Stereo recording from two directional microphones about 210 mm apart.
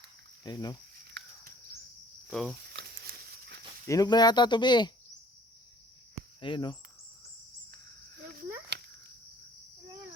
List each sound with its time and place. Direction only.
0.4 s speech: 20° left (ahead or behind)
2.3 s speech: centre (ahead or behind)
2.7 s a sound: 50° right (ahead or behind)
3.8 s speech: 15° left (ahead or behind)
6.4 s speech: 25° left (ahead or behind)